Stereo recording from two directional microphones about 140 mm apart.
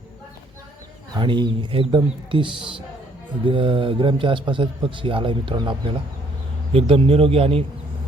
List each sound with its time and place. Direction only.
1.1 s a man's voice: 35° right (ahead or behind)
6.7 s a man's voice: 40° right (ahead or behind)